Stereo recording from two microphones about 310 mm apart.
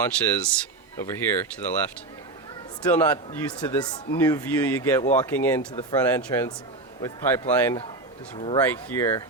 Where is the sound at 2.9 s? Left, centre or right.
Centre.